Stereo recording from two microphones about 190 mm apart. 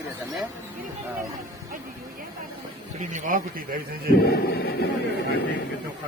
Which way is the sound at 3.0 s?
40° right (ahead or behind).